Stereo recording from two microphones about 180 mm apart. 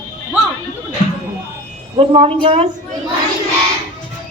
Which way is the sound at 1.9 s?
35° right (ahead or behind).